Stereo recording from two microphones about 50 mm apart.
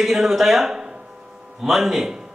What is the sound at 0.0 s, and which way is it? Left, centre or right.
A man's voice, centre.